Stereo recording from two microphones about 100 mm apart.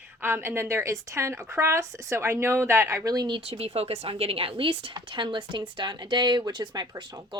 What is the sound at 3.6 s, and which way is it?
Speech, 85° right.